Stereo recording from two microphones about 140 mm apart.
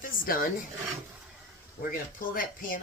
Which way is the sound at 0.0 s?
90° left.